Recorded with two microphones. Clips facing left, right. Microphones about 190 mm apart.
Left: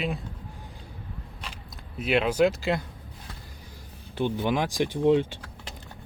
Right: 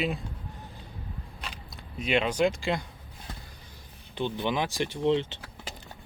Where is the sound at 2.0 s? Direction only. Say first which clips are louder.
Left 3 dB; 5° left (ahead or behind).